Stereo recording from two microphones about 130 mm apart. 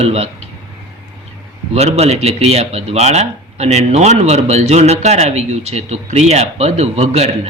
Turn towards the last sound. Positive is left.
turn(degrees=-55)  # may be behind; listen again after turning